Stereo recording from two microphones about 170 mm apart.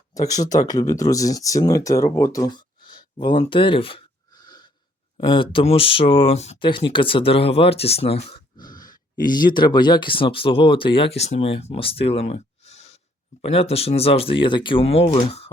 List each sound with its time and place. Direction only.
0.1 s speech: 20° left (ahead or behind)
2.1 s a sound: 20° left (ahead or behind)
5.2 s speech: 30° left (ahead or behind)
8.5 s grunt: 25° left (ahead or behind)
9.2 s speech: 25° left (ahead or behind)